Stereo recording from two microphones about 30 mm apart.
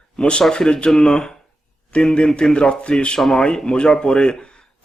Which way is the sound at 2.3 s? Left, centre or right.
Left.